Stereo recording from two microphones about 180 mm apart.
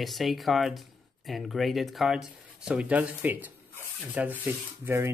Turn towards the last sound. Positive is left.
turn(degrees=-15)  # may be behind; listen again after turning